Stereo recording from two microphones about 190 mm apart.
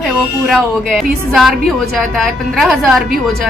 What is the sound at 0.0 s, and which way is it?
A woman's voice, centre (ahead or behind).